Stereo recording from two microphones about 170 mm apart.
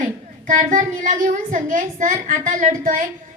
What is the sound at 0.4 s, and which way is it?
A woman's voice, 50° right (ahead or behind).